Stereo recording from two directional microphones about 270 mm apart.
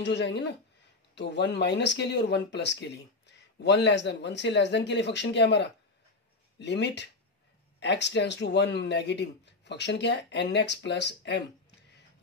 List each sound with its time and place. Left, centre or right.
0.0 s speech: left